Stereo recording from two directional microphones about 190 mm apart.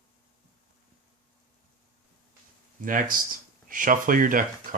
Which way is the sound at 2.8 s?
45° right (ahead or behind).